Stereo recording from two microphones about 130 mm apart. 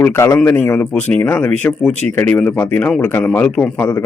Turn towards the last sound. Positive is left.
turn(degrees=15)  # may be behind; listen again after turning